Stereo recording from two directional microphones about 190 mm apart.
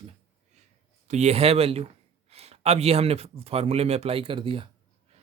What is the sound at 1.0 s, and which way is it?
Speech, 35° right (ahead or behind).